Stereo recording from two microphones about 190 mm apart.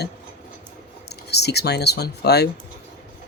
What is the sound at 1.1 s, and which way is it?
Speech, 60° left (ahead or behind).